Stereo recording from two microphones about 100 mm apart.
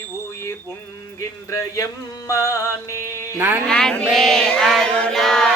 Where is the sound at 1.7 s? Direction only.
30° left (ahead or behind).